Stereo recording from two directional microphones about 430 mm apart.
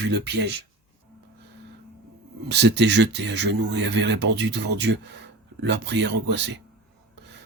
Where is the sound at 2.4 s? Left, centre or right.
Right.